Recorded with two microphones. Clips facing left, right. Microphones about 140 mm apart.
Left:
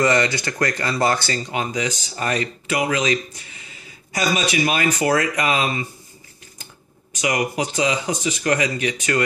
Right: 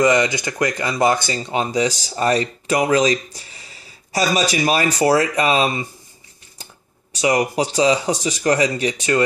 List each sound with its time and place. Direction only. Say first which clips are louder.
0.0 s speech: right 2 dB; 15° right (ahead or behind)
1.5 s speech: right 7 dB; 30° right (ahead or behind)